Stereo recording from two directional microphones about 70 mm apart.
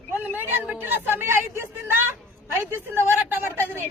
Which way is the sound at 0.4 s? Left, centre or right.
Right.